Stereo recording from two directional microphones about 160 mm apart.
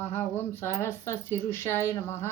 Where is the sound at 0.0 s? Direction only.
10° left (ahead or behind).